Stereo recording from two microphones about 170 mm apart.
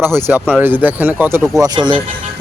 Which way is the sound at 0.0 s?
15° right (ahead or behind).